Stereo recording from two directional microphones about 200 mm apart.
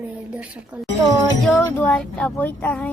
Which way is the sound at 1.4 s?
5° left (ahead or behind).